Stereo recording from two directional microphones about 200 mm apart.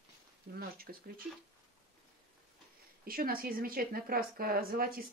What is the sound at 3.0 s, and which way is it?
Speech, 45° right (ahead or behind).